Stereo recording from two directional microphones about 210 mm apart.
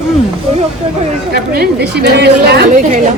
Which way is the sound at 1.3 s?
50° right (ahead or behind).